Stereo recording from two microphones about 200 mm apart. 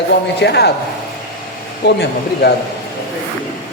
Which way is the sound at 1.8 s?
55° left (ahead or behind).